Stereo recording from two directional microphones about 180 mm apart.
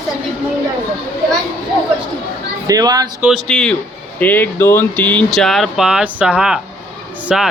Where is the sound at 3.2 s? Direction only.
5° right (ahead or behind).